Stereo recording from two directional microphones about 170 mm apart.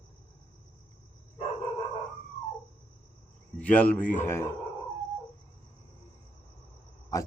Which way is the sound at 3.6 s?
10° left (ahead or behind).